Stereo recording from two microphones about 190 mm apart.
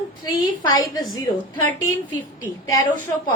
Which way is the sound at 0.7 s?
20° left (ahead or behind).